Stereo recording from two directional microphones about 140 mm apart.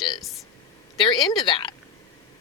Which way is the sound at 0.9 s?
35° left (ahead or behind).